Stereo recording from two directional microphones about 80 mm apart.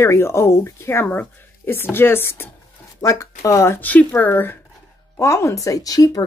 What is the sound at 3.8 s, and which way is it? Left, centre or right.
Speech, left.